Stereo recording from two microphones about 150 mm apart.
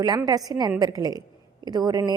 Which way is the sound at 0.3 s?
25° right (ahead or behind).